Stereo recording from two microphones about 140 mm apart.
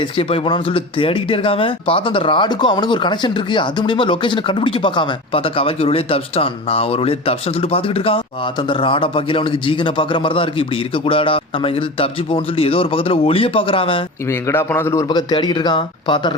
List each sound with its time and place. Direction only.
0.0 s speech: 40° left (ahead or behind)
14.3 s a man's voice: 20° left (ahead or behind)
15.1 s speech: 30° left (ahead or behind)